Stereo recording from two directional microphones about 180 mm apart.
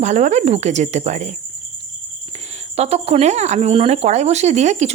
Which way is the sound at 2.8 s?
35° right (ahead or behind).